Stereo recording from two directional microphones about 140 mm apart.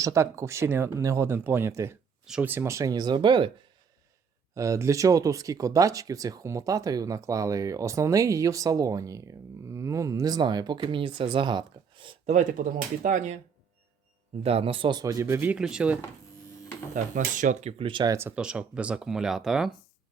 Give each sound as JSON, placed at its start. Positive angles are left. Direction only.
{"t": 0.0, "sound": "speech", "side_deg": -20}
{"t": 2.2, "sound": "speech", "side_deg": -5}
{"t": 2.5, "sound": "speech", "side_deg": -20}
{"t": 4.5, "sound": "speech", "side_deg": -20}
{"t": 12.3, "sound": "speech", "side_deg": -65}
{"t": 14.4, "sound": "speech", "side_deg": -45}
{"t": 16.9, "sound": "speech", "side_deg": -65}
{"t": 18.1, "sound": "speech", "side_deg": -15}